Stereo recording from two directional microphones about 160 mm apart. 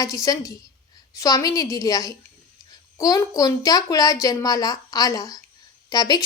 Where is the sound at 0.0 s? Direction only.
20° left (ahead or behind).